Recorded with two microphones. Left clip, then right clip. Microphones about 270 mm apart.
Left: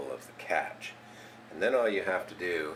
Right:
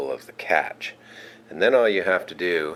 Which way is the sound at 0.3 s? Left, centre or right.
Centre.